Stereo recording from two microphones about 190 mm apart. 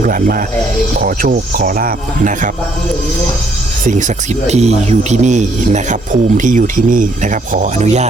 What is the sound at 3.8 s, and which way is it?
A man's voice, 40° right (ahead or behind).